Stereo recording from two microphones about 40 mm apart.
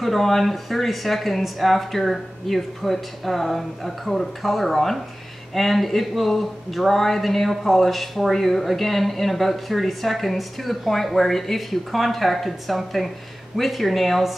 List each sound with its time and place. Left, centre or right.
0.0 s speech: centre